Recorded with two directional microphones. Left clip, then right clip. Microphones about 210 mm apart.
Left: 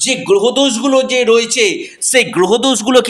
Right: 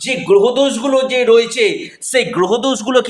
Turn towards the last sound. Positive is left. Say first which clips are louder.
# left 3 dB
turn(degrees=20)  # may be behind; listen again after turning